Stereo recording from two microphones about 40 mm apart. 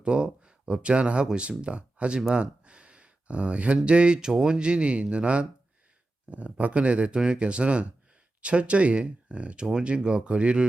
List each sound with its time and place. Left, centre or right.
0.0 s speech: right